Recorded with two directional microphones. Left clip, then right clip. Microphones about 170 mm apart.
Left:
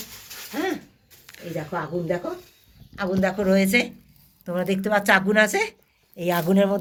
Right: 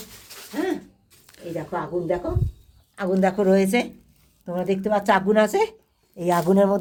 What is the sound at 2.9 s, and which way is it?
A woman's voice, 50° right (ahead or behind).